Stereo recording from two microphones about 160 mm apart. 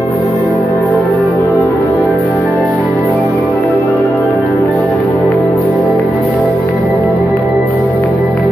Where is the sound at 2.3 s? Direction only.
5° left (ahead or behind).